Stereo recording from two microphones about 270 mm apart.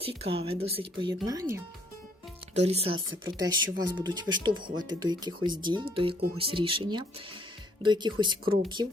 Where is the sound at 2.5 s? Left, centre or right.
Right.